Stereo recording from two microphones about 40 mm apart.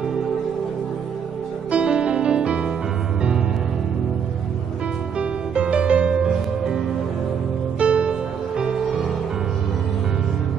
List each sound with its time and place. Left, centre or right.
1.7 s music: right
5.2 s music: right
7.8 s music: right